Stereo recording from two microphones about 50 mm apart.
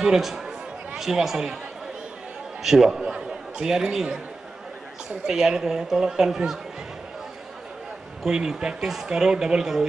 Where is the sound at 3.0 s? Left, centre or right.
Centre.